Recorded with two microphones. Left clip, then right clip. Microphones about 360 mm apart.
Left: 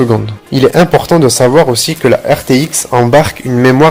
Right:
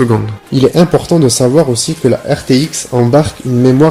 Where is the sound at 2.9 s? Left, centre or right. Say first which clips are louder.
Left 3 dB; left.